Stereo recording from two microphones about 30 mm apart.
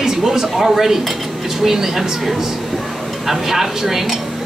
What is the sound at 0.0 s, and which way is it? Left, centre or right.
Speech, centre.